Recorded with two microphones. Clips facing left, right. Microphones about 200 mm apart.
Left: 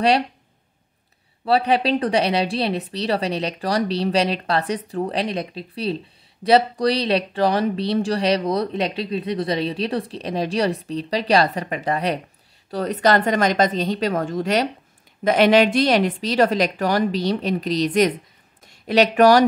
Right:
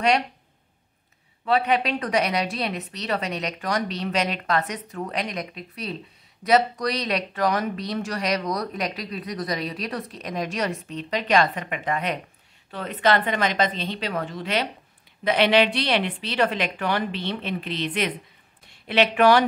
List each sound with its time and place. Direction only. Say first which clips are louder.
1.4 s a woman's voice: left 3 dB; 35° left (ahead or behind)